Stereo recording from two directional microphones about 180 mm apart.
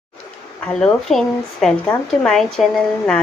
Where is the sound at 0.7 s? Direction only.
Centre (ahead or behind).